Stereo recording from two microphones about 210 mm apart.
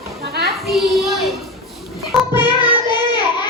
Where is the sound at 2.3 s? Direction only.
20° left (ahead or behind).